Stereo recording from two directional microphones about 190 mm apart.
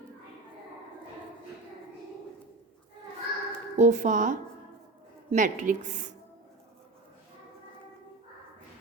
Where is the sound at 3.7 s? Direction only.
40° right (ahead or behind).